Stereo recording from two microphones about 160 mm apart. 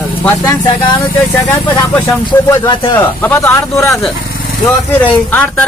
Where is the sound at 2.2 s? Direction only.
25° left (ahead or behind).